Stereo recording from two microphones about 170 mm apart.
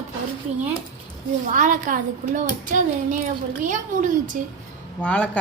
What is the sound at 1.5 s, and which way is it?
A child's voice, 50° right (ahead or behind).